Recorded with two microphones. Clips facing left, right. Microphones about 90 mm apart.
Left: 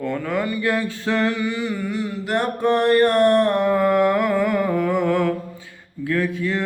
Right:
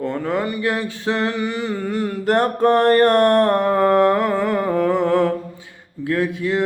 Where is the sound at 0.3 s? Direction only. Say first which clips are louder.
Left 2 dB; 25° right (ahead or behind).